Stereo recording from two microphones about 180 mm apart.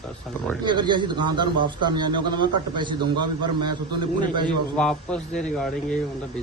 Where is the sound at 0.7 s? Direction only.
25° right (ahead or behind).